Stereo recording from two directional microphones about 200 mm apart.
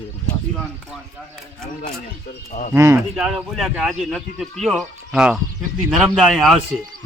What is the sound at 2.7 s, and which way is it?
Speech, 15° right (ahead or behind).